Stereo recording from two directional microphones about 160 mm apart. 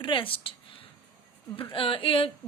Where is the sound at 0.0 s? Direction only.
30° left (ahead or behind).